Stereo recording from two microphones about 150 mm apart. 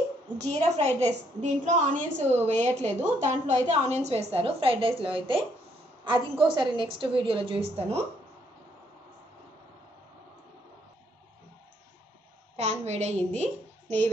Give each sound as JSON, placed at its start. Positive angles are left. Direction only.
{"t": 0.4, "sound": "a woman's voice", "side_deg": -45}
{"t": 12.5, "sound": "a woman's voice", "side_deg": -45}